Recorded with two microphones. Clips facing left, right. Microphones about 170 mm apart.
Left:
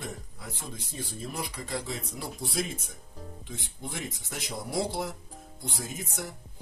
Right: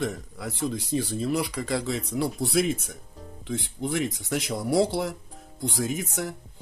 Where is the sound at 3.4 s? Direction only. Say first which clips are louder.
Right 13 dB; 85° right.